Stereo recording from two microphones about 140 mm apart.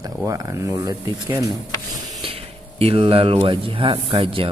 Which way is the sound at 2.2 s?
45° right (ahead or behind).